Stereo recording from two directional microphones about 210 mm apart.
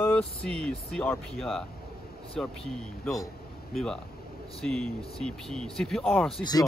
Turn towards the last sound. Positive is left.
turn(degrees=20)  # may be behind; listen again after turning